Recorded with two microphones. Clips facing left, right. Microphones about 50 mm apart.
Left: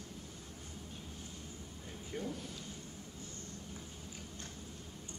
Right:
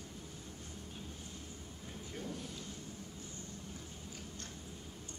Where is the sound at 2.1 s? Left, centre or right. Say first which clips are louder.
Left 4 dB; centre.